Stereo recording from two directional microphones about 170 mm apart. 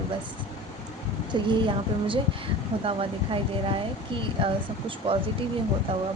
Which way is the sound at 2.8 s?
30° right (ahead or behind).